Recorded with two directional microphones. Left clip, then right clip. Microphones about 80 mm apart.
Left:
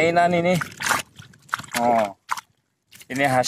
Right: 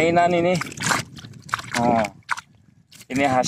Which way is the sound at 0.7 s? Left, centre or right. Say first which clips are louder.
Even; right.